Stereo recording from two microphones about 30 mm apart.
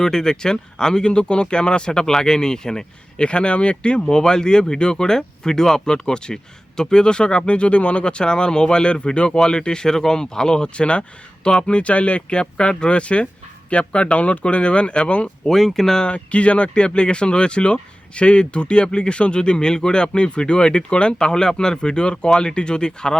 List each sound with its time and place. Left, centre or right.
0.0 s speech: centre
1.0 s speech: left
1.9 s speech: left
3.2 s speech: left
4.2 s speech: left
14.4 s speech: left
15.4 s speech: centre
16.0 s speech: left